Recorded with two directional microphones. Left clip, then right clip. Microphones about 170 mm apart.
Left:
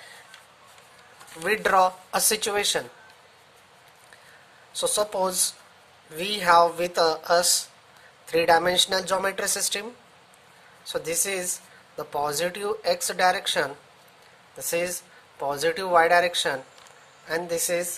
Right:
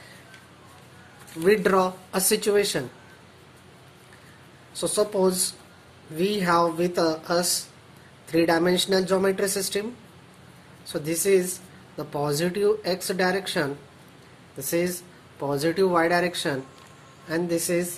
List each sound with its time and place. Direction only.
1.4 s speech: 25° left (ahead or behind)
4.7 s speech: 25° left (ahead or behind)
10.9 s speech: 25° left (ahead or behind)